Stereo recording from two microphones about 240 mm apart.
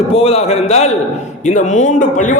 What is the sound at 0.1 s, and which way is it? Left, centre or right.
A man's voice, left.